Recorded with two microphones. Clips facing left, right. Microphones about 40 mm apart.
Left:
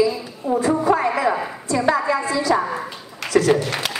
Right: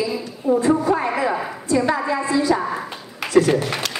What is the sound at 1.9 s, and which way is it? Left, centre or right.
Music, centre.